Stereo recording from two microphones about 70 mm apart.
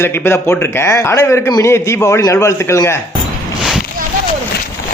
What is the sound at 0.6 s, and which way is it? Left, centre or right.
A man's voice, left.